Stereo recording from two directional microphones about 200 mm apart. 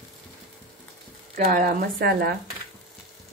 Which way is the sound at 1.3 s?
45° right (ahead or behind).